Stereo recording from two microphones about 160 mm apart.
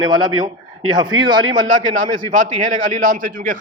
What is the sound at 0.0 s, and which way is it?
A man's voice, 25° right (ahead or behind).